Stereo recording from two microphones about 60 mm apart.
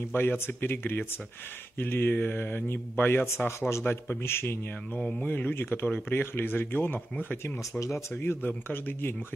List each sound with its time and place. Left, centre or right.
0.1 s speech: left
3.3 s speech: left
4.9 s mantra: centre
5.2 s speech: left
7.8 s speech: left